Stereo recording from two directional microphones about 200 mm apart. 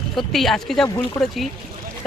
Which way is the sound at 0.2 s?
Centre (ahead or behind).